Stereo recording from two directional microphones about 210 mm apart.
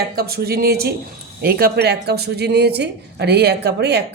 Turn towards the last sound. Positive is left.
turn(degrees=-50)  # may be behind; listen again after turning